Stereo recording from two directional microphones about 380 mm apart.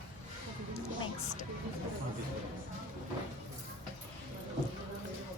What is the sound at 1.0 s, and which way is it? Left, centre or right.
Music, centre.